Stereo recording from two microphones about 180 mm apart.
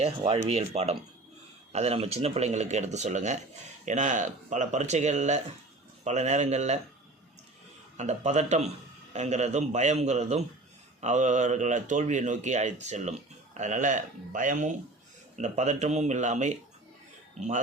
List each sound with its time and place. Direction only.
0.0 s speech: 40° right (ahead or behind)
7.9 s speech: 40° right (ahead or behind)